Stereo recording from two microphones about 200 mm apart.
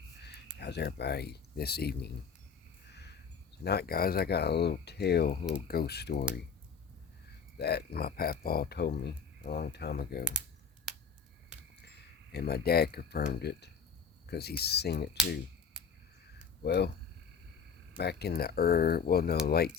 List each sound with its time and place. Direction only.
0.2 s a sound: 55° left (ahead or behind)
0.6 s speech: 55° left (ahead or behind)
2.9 s a sound: 55° left (ahead or behind)
3.6 s speech: 55° left (ahead or behind)
7.6 s speech: 55° left (ahead or behind)
10.9 s a sound: centre (ahead or behind)
12.3 s speech: 55° left (ahead or behind)
16.6 s speech: 55° left (ahead or behind)
17.9 s speech: 55° left (ahead or behind)